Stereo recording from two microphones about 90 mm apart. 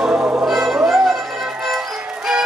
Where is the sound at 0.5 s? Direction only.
5° right (ahead or behind).